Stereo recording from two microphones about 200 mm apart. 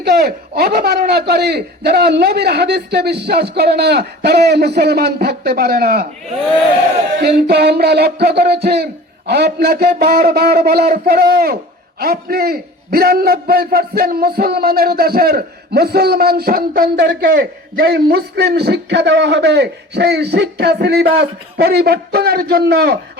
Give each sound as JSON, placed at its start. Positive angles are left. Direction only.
{"t": 0.0, "sound": "a man's voice", "side_deg": -50}
{"t": 7.2, "sound": "music", "side_deg": -55}
{"t": 8.6, "sound": "a man's voice", "side_deg": -55}